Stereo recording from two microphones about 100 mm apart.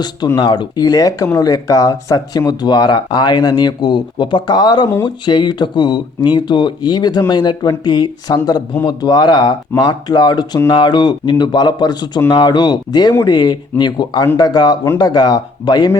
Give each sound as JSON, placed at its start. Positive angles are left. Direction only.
{"t": 0.3, "sound": "speech", "side_deg": 45}